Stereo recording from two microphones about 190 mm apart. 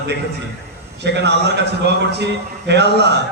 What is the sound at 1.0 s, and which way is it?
A man's voice, 65° right (ahead or behind).